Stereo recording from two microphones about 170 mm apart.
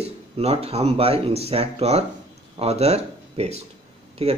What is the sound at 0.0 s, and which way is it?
A man's voice, 40° right (ahead or behind).